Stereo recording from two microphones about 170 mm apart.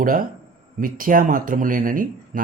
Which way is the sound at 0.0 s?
55° right (ahead or behind).